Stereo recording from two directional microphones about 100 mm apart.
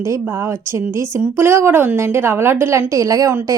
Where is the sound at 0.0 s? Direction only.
30° right (ahead or behind).